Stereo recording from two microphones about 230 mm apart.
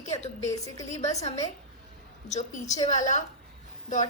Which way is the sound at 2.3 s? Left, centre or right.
Left.